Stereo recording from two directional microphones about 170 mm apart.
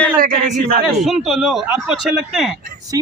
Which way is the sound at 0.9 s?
Centre (ahead or behind).